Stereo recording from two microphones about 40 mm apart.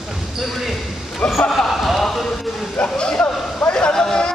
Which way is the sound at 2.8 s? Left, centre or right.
Left.